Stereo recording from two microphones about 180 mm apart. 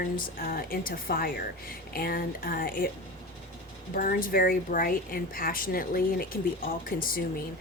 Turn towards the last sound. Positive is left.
turn(degrees=50)  # may be behind; listen again after turning